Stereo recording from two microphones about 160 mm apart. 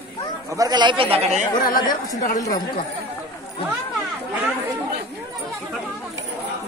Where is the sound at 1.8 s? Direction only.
25° left (ahead or behind).